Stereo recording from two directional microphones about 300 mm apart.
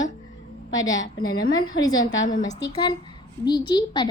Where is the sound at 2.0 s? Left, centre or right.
Left.